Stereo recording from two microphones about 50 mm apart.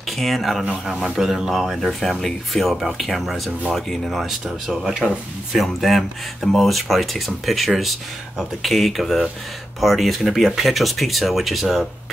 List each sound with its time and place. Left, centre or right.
0.1 s speech: centre